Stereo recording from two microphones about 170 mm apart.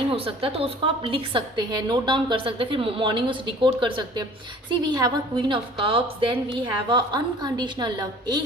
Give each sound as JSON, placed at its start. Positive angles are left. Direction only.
{"t": 0.1, "sound": "a woman's voice", "side_deg": -30}